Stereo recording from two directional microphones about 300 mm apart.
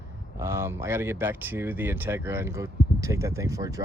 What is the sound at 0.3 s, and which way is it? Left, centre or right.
Speech, centre.